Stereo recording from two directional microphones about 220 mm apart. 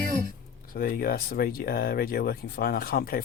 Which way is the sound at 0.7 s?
40° left (ahead or behind).